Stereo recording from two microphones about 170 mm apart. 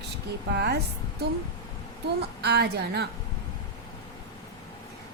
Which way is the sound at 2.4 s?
75° right (ahead or behind).